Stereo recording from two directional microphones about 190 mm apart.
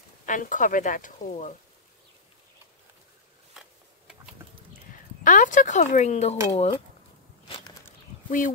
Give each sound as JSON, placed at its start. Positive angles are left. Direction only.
{"t": 0.3, "sound": "speech", "side_deg": 45}
{"t": 5.2, "sound": "speech", "side_deg": 45}
{"t": 7.4, "sound": "walk", "side_deg": 25}
{"t": 8.3, "sound": "speech", "side_deg": 45}